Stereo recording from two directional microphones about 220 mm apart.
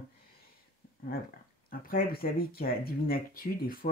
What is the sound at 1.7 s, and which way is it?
Speech, 40° left (ahead or behind).